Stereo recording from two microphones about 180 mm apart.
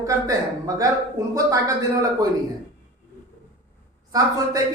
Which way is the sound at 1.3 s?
20° right (ahead or behind).